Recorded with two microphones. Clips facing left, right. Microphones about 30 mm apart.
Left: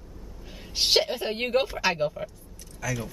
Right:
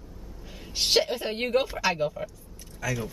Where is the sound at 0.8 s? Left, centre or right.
Centre.